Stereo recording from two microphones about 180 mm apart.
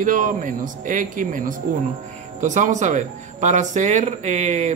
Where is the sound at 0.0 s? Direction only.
45° right (ahead or behind).